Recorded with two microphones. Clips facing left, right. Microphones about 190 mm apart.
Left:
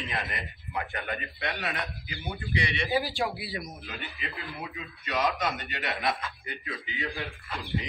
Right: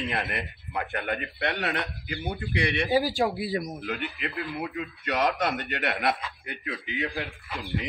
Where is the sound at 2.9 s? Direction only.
35° right (ahead or behind).